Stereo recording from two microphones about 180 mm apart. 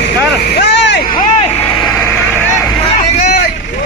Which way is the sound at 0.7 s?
75° left (ahead or behind).